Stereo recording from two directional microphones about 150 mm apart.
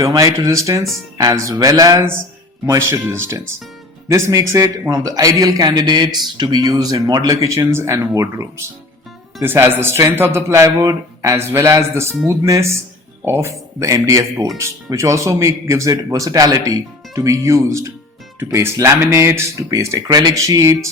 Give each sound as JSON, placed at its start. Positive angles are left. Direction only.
{"t": 0.0, "sound": "a man's voice", "side_deg": -25}